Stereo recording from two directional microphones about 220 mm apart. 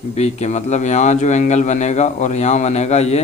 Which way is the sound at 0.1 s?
30° left (ahead or behind).